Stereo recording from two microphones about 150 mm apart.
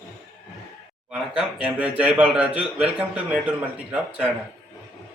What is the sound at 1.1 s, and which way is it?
A man's voice, 5° right (ahead or behind).